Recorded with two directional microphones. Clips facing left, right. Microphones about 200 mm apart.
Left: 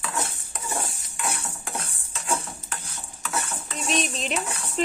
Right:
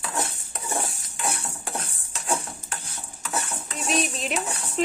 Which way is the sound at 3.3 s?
5° right (ahead or behind).